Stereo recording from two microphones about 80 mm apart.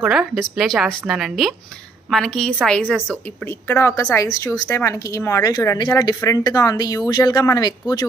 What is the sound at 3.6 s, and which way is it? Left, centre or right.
Speech, left.